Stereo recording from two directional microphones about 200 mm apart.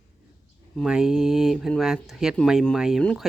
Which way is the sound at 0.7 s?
Centre (ahead or behind).